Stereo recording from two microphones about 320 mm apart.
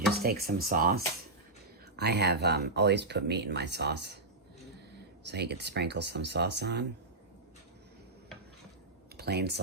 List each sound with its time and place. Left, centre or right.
0.2 s speech: right
5.2 s speech: right
9.1 s speech: right